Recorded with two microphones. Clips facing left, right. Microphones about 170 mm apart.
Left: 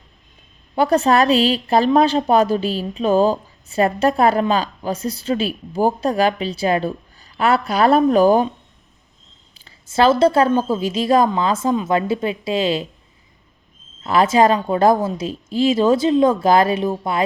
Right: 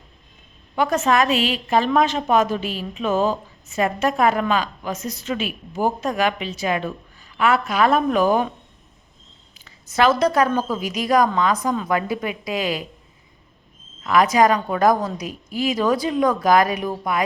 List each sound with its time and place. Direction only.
0.8 s a woman's voice: 35° left (ahead or behind)
9.6 s a woman's voice: 30° left (ahead or behind)
14.0 s a woman's voice: 30° left (ahead or behind)